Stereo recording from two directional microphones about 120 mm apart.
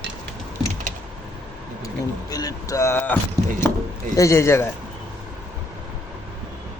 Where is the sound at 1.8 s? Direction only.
30° left (ahead or behind); by 3.2 s 15° left (ahead or behind).